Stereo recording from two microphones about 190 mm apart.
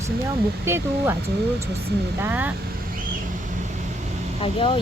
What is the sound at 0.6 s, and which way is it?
Speech, 15° right (ahead or behind).